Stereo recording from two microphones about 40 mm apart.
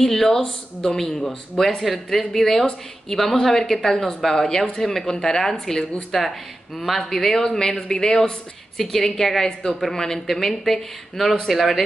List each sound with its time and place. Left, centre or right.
0.0 s speech: centre
1.6 s speech: centre